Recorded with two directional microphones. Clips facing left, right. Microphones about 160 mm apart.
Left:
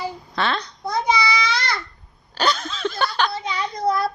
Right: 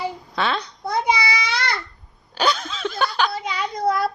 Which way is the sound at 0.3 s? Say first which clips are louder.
Even; 5° right (ahead or behind).